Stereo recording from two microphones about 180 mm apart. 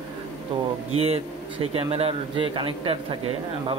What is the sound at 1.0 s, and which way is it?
A man's voice, 35° right (ahead or behind).